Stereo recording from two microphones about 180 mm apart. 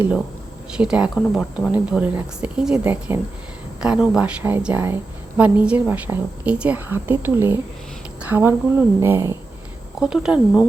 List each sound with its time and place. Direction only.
0.8 s a woman's voice: 5° right (ahead or behind)
10.0 s speech: 5° right (ahead or behind)